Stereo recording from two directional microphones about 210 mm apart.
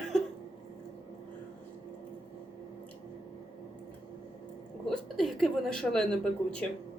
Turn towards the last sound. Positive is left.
turn(degrees=5)  # may be behind; listen again after turning